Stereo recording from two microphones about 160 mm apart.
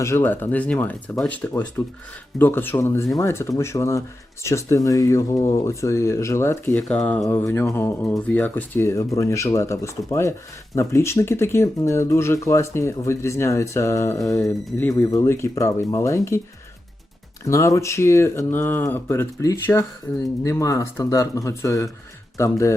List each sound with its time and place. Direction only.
0.0 s speech: 15° left (ahead or behind)
17.4 s speech: 20° left (ahead or behind)